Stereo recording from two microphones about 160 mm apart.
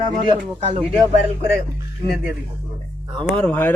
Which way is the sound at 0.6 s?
40° right (ahead or behind).